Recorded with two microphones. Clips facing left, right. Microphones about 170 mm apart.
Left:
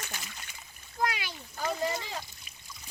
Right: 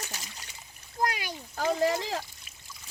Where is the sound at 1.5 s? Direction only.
80° right.